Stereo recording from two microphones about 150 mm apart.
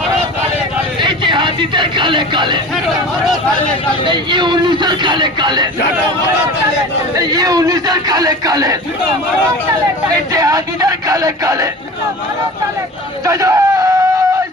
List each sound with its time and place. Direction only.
1.0 s a sound: 30° right (ahead or behind)
4.0 s speech: 30° right (ahead or behind)
7.2 s a man's voice: 25° right (ahead or behind)
10.3 s a man's voice: 25° right (ahead or behind)
13.2 s a man's voice: 20° right (ahead or behind)